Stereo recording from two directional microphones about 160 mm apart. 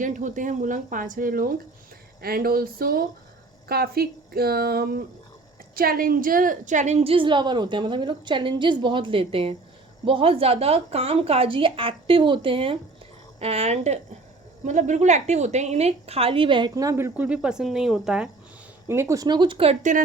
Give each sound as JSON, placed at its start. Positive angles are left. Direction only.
{"t": 0.0, "sound": "a woman's voice", "side_deg": -50}
{"t": 18.9, "sound": "speech", "side_deg": -15}